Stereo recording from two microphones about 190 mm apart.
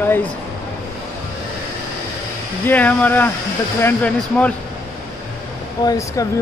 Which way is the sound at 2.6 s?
10° left (ahead or behind).